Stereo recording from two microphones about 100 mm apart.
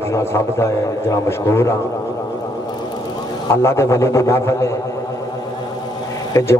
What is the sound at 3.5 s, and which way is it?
A man's voice, 25° left (ahead or behind).